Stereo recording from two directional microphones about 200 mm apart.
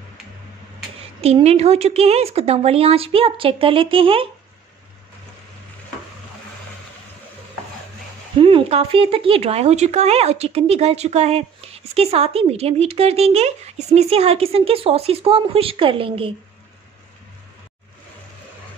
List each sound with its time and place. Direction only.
1.2 s speech: 30° right (ahead or behind)
8.4 s speech: 25° right (ahead or behind)